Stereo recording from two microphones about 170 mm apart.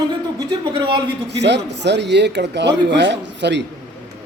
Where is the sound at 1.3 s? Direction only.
90° right.